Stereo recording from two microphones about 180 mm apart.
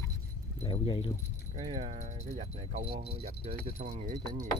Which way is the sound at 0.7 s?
30° left (ahead or behind).